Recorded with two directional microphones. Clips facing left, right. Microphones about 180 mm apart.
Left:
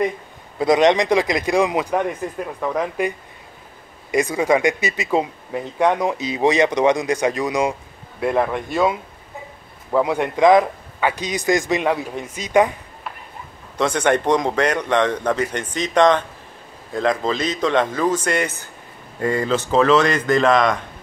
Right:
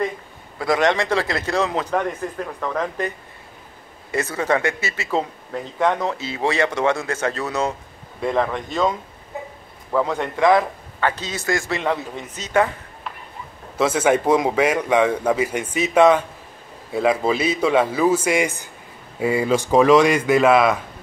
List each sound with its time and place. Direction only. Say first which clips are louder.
0.6 s speech: left 4 dB; 20° left (ahead or behind)
9.9 s speech: left 3 dB; 15° left (ahead or behind)
13.7 s speech: right 1 dB; 5° right (ahead or behind)